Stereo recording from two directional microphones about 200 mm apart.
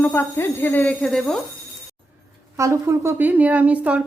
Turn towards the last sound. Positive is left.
turn(degrees=-5)  # may be behind; listen again after turning